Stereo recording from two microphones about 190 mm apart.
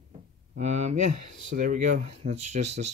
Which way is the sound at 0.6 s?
35° right (ahead or behind).